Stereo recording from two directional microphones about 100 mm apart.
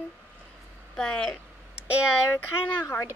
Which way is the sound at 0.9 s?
5° left (ahead or behind).